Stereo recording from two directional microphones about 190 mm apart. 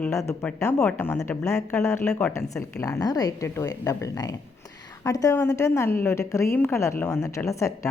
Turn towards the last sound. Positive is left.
turn(degrees=15)  # may be behind; listen again after turning